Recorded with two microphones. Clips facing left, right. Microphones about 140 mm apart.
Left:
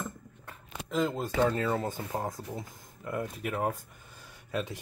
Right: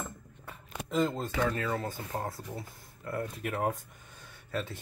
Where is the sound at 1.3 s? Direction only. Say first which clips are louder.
Left 7 dB; 25° left (ahead or behind).